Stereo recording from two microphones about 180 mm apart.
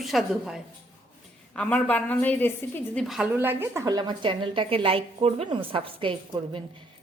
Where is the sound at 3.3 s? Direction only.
15° right (ahead or behind); by 6.6 s 30° right (ahead or behind).